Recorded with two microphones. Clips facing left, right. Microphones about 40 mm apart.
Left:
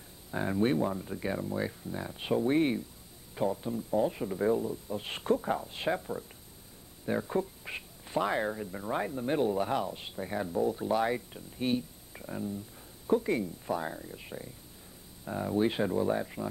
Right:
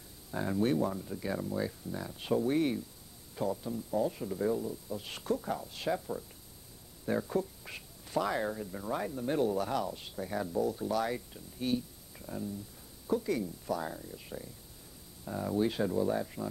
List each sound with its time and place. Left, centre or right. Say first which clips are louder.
0.3 s speech: left 2 dB; left